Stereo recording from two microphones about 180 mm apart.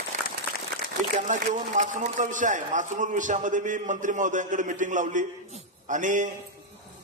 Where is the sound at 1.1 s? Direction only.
45° right (ahead or behind).